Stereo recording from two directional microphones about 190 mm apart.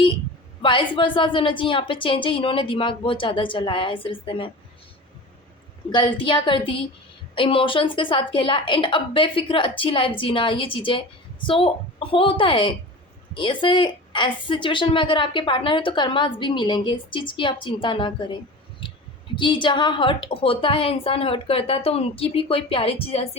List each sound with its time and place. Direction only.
0.6 s a woman's voice: 25° left (ahead or behind)
5.9 s a woman's voice: 25° left (ahead or behind)
18.8 s clicking: 25° left (ahead or behind)
19.4 s a woman's voice: 25° left (ahead or behind)